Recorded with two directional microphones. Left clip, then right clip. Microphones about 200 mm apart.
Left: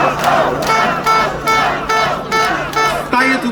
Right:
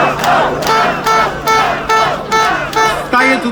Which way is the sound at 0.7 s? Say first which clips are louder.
Right 2 dB; 20° right (ahead or behind).